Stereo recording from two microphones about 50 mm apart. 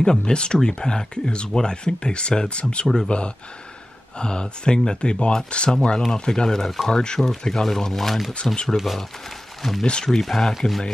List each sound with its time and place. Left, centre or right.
0.0 s speech: centre
9.8 s speech: centre
10.2 s speech: centre